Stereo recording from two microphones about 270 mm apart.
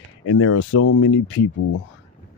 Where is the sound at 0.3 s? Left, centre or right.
Left.